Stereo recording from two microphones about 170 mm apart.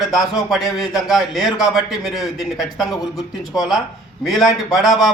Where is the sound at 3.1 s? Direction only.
20° left (ahead or behind).